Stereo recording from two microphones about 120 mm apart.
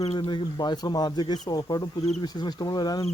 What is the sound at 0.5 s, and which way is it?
Speech, 35° left (ahead or behind).